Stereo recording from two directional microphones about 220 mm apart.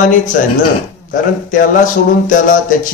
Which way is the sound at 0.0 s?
35° left (ahead or behind).